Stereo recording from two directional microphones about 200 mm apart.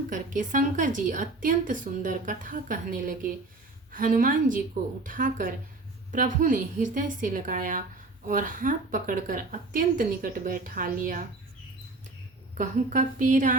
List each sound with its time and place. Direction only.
0.1 s a woman's voice: 40° right (ahead or behind)
12.5 s a woman's voice: 40° right (ahead or behind)